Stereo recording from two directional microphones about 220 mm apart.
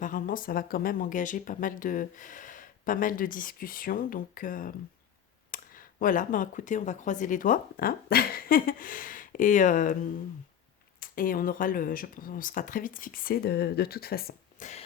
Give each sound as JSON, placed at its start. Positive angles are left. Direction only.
{"t": 0.0, "sound": "speech", "side_deg": 40}
{"t": 11.0, "sound": "speech", "side_deg": 40}